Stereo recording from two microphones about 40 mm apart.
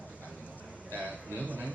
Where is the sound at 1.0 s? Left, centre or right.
Right.